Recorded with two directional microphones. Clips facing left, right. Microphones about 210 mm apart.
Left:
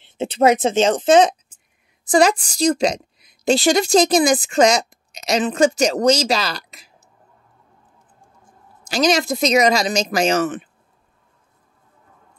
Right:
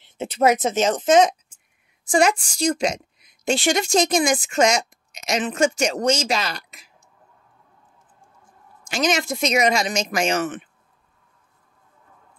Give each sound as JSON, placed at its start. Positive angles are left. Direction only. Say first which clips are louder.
{"t": 0.0, "sound": "a woman's voice", "louder": "left 3 dB", "side_deg": 30}
{"t": 8.8, "sound": "a woman's voice", "louder": "left 4 dB", "side_deg": 35}